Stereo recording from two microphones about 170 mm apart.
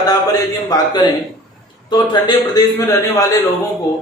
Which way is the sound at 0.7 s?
25° left (ahead or behind).